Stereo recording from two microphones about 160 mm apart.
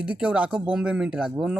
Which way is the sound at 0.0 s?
10° right (ahead or behind).